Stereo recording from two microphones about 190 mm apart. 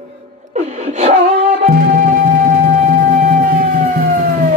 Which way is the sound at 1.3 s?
50° right (ahead or behind).